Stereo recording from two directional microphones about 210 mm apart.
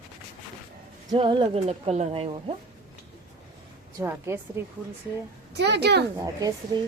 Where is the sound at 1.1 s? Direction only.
20° right (ahead or behind).